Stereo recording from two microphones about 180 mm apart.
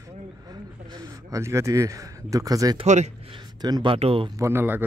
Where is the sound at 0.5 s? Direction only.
25° right (ahead or behind).